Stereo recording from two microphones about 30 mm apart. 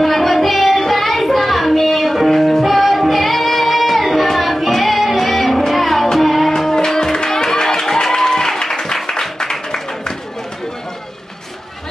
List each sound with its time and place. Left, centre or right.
0.0 s music: centre
7.0 s music: centre